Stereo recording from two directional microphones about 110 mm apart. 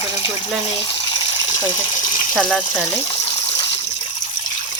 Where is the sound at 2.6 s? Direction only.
60° left (ahead or behind).